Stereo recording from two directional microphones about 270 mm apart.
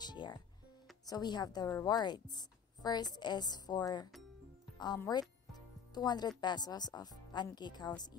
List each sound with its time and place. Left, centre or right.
0.0 s music: centre
1.0 s a woman's voice: centre